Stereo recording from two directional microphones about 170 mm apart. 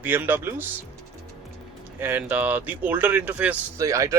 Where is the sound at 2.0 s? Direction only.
10° right (ahead or behind).